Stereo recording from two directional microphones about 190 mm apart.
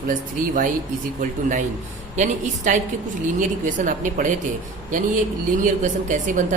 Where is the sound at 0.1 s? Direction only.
45° right (ahead or behind).